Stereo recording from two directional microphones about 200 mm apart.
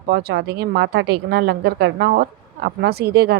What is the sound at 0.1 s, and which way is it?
A woman's voice, 55° right (ahead or behind).